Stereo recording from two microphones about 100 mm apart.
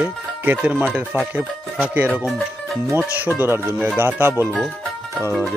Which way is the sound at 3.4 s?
25° right (ahead or behind).